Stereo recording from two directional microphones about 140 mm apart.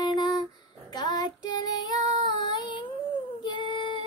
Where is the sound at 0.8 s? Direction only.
30° left (ahead or behind).